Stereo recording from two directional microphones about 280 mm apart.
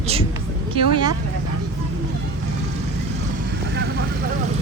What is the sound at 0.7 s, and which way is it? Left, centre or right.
Vehicle, centre.